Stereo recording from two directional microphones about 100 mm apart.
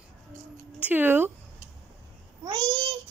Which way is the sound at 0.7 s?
15° right (ahead or behind).